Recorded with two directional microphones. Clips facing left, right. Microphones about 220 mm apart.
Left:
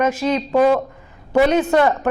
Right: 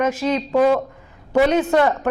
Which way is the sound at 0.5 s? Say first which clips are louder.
Left 1 dB; 30° left (ahead or behind).